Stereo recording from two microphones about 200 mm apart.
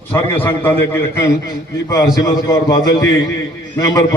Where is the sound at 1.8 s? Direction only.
20° left (ahead or behind).